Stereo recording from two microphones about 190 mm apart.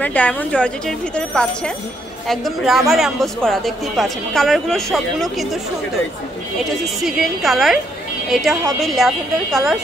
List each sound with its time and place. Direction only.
0.0 s a man's voice: 5° left (ahead or behind)
6.6 s a man's voice: centre (ahead or behind)